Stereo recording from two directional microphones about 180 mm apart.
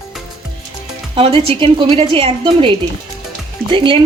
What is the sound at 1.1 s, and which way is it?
Speech, 30° right (ahead or behind).